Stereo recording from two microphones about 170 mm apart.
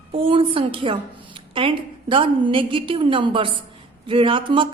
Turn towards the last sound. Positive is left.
turn(degrees=-30)  # may be behind; listen again after turning